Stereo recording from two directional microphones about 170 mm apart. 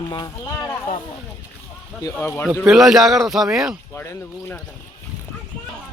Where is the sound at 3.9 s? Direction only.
15° left (ahead or behind).